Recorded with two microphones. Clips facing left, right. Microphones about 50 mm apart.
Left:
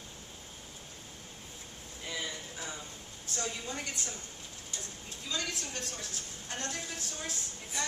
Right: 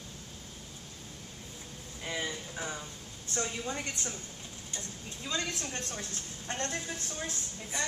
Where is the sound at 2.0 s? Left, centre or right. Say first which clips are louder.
Right 3 dB; right.